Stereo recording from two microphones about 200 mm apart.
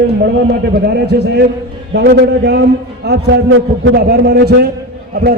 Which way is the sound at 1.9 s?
55° right (ahead or behind).